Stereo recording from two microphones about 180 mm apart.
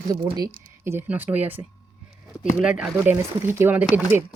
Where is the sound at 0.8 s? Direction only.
15° right (ahead or behind).